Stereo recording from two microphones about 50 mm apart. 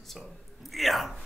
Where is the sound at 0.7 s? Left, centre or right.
Centre.